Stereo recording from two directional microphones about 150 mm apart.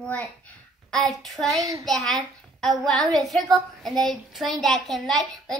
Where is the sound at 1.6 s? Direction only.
25° right (ahead or behind).